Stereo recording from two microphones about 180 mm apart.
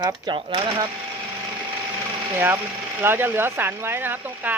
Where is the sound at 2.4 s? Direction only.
10° right (ahead or behind).